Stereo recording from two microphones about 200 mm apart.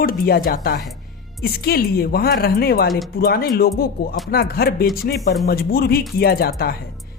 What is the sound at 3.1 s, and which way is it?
Speech, 50° left (ahead or behind).